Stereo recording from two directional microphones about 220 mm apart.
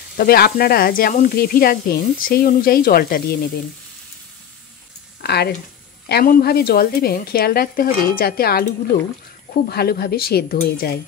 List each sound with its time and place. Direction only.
0.2 s speech: 45° left (ahead or behind)
5.2 s a woman's voice: 45° left (ahead or behind)